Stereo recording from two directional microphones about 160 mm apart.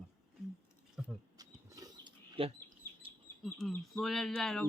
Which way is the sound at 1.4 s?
25° right (ahead or behind).